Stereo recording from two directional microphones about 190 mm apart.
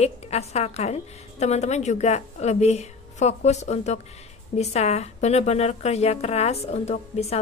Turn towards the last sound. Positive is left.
turn(degrees=35)  # may be behind; listen again after turning